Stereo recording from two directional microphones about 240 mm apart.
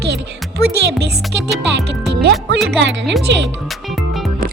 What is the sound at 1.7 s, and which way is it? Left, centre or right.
Music, right.